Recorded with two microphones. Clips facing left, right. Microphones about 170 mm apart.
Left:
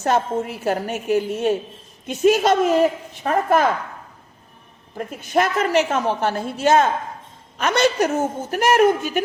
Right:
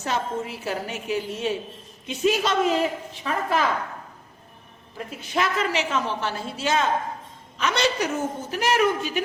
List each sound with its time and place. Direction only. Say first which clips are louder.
0.0 s a woman's voice: left 7 dB; 50° left (ahead or behind)
4.9 s a woman's voice: left 6 dB; 50° left (ahead or behind)